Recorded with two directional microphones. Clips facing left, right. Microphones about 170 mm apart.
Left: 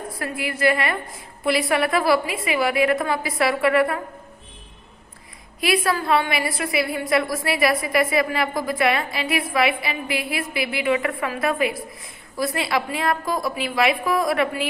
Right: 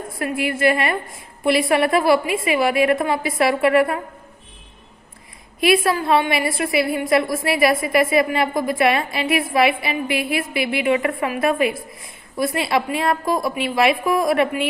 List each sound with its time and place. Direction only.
0.2 s a woman's voice: 25° right (ahead or behind)
5.5 s a woman's voice: 25° right (ahead or behind)